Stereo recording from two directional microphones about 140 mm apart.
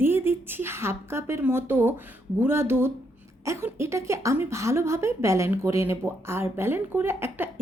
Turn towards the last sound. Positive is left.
turn(degrees=-15)  # may be behind; listen again after turning